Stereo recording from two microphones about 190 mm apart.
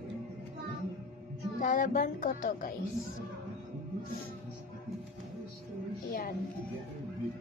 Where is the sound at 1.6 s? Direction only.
50° left (ahead or behind).